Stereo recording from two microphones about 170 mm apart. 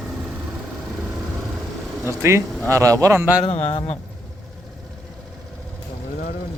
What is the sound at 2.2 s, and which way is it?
Speech, 15° right (ahead or behind).